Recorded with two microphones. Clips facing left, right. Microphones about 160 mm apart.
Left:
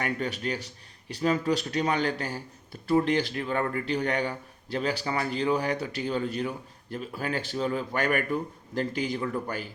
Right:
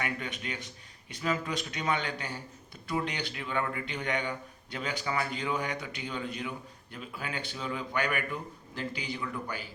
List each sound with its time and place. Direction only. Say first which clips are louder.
0.0 s a man's voice: left 6 dB; 40° left (ahead or behind)